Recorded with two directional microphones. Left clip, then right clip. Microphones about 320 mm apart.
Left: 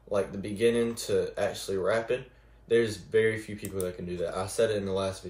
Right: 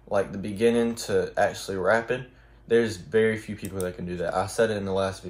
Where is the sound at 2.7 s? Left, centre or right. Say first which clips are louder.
Right 3 dB; centre.